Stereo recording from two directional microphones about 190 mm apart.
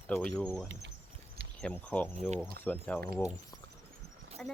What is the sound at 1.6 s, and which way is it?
Speech, 5° left (ahead or behind).